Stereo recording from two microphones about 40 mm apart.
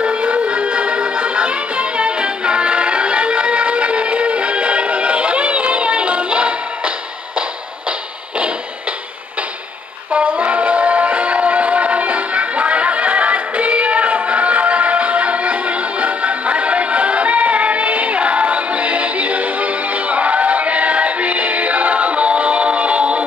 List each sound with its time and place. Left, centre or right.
0.0 s music: right
10.1 s music: right